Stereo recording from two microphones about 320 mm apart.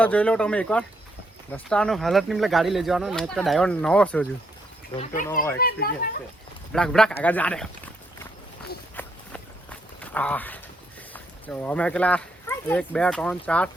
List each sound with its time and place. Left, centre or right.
0.0 s speech: centre
4.9 s speech: left
6.7 s speech: centre
9.0 s walk: centre
11.1 s speech: centre